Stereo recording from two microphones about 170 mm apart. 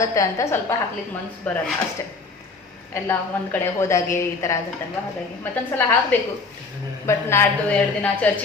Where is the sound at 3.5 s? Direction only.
15° left (ahead or behind).